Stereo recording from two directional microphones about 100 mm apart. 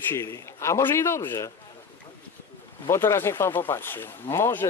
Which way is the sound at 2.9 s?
25° left (ahead or behind).